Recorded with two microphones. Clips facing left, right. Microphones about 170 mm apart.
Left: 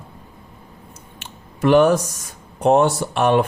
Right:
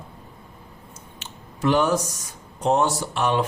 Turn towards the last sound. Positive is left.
turn(degrees=55)  # may be behind; listen again after turning